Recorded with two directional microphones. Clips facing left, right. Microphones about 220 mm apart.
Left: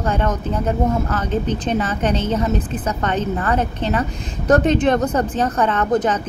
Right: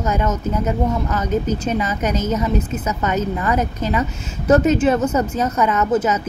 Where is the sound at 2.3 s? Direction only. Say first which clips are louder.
Even; 30° left (ahead or behind).